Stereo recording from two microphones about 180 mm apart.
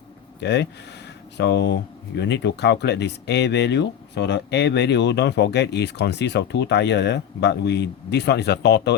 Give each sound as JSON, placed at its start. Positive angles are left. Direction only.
{"t": 0.3, "sound": "speech", "side_deg": 70}